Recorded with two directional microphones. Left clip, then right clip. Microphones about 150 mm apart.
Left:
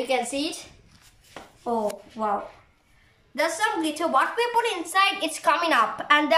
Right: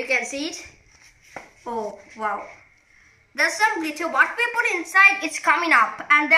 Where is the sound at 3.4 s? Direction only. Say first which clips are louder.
Right 4 dB; 50° left (ahead or behind).